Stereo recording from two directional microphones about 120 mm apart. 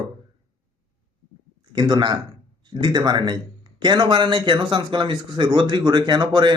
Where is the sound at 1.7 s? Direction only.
40° right (ahead or behind).